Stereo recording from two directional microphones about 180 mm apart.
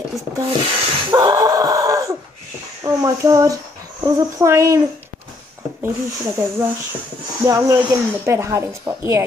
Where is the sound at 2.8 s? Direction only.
20° right (ahead or behind).